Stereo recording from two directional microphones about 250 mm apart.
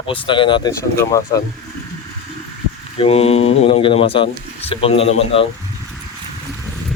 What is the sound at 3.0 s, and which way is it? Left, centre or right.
Speech, left.